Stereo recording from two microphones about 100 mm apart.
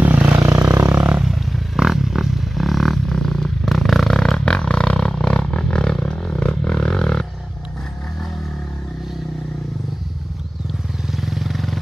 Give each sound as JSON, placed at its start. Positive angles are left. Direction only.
{"t": 0.0, "sound": "vehicle", "side_deg": -20}
{"t": 1.1, "sound": "a sound", "side_deg": -5}
{"t": 11.2, "sound": "vehicle", "side_deg": 0}